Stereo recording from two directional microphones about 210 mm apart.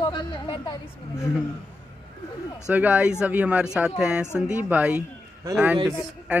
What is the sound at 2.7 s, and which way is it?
Speech, 5° right (ahead or behind).